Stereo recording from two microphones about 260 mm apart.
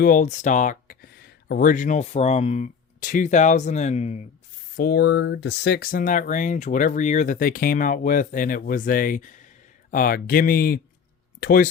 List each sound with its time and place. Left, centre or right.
0.0 s speech: left
4.8 s speech: left